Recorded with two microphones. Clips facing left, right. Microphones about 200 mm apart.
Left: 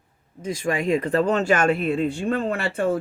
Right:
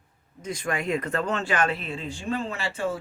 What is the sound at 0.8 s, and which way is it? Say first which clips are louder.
Speech: left 8 dB; 30° left (ahead or behind).